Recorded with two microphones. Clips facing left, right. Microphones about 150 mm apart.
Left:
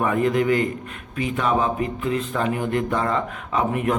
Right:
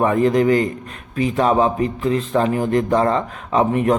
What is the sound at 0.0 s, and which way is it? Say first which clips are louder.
A man's voice: right 5 dB; 35° right (ahead or behind).